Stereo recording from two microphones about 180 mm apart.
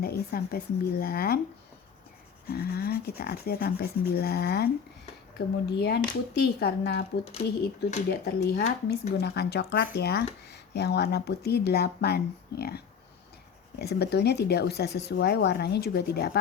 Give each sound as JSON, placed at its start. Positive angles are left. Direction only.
{"t": 0.0, "sound": "speech", "side_deg": 60}
{"t": 2.5, "sound": "speech", "side_deg": 60}
{"t": 7.4, "sound": "speech", "side_deg": 50}
{"t": 8.1, "sound": "speech", "side_deg": 65}